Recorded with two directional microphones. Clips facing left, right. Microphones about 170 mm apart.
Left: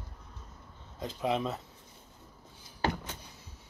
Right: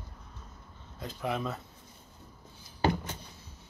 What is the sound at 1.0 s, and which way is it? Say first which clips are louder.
Speech: left 3 dB; 20° left (ahead or behind).